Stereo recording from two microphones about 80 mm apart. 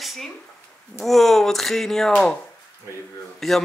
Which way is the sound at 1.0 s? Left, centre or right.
Centre.